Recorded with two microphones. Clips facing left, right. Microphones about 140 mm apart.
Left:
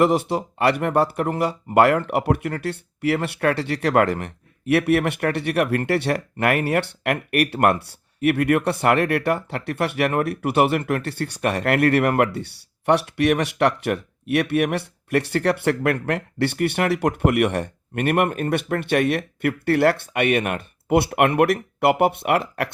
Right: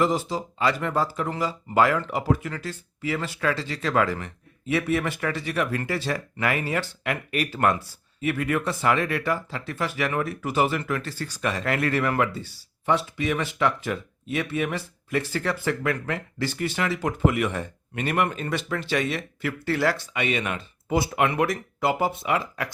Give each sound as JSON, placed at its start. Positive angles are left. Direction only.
{"t": 0.0, "sound": "speech", "side_deg": 65}